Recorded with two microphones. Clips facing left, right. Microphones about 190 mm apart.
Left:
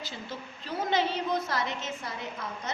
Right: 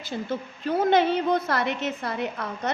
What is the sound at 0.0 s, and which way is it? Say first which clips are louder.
A woman's voice: right 9 dB; 55° right (ahead or behind).